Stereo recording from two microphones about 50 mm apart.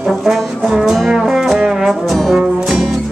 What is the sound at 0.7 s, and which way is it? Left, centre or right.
Brass instrument, centre.